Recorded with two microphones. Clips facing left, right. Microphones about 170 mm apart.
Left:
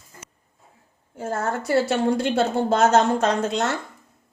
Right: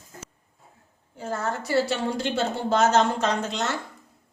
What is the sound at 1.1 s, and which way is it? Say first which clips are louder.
A woman's voice: left 3 dB; 50° left (ahead or behind).